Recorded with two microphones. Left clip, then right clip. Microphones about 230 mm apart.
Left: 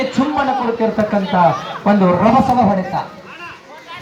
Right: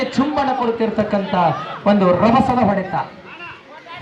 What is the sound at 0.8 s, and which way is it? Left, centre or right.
A woman's voice, centre.